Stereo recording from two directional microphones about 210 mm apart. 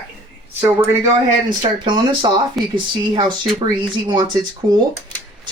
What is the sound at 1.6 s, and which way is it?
Speech, 20° right (ahead or behind).